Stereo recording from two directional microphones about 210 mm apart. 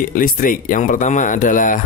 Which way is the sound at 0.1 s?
40° left (ahead or behind).